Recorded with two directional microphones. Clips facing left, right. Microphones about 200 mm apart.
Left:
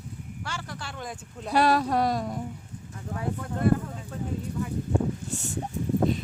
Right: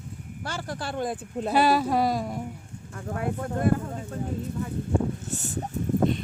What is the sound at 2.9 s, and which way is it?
Speech, 55° right (ahead or behind).